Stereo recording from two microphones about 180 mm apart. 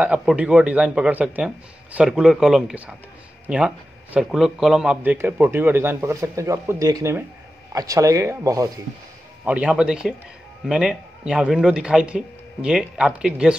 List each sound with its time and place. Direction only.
0.0 s a man's voice: 5° right (ahead or behind)